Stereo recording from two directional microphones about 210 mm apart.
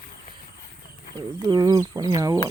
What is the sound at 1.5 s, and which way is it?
Speech, 20° right (ahead or behind).